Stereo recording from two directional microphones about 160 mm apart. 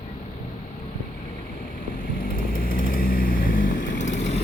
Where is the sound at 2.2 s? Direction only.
60° left (ahead or behind).